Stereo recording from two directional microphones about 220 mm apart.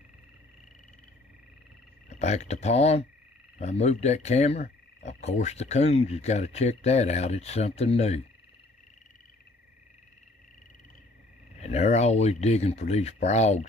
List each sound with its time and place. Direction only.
2.0 s speech: 30° left (ahead or behind)
11.6 s speech: 30° left (ahead or behind)